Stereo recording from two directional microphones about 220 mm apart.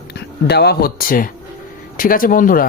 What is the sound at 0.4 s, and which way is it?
Speech, 50° left (ahead or behind).